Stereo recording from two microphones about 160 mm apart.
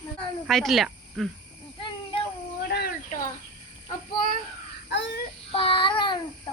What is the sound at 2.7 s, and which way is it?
Cat, 80° left.